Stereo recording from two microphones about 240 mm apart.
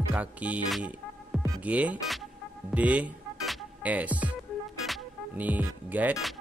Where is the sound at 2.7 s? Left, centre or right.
Centre.